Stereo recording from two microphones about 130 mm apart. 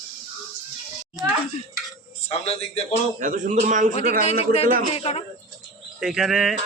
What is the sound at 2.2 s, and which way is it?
Speech, 50° left (ahead or behind).